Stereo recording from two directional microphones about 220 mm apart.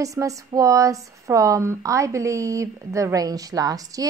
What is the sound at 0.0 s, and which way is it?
A woman's voice, 15° right (ahead or behind).